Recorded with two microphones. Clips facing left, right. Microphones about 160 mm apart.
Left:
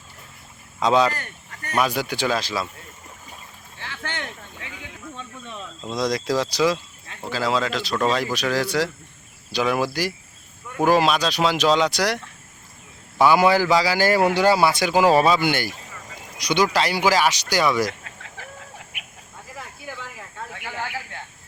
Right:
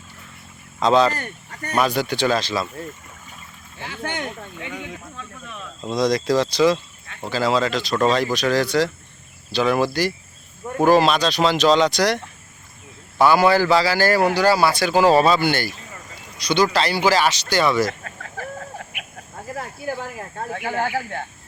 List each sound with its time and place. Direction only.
0.8 s a man's voice: 10° left (ahead or behind)
3.8 s speech: 20° right (ahead or behind)
4.2 s speech: 35° right (ahead or behind)
5.8 s a man's voice: centre (ahead or behind)
17.8 s chicken: 45° right (ahead or behind)
19.5 s snake: 45° right (ahead or behind)